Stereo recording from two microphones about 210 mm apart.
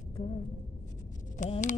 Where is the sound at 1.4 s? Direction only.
35° left (ahead or behind).